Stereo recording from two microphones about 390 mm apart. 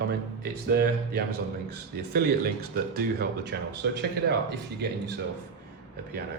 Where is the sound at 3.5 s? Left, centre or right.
Right.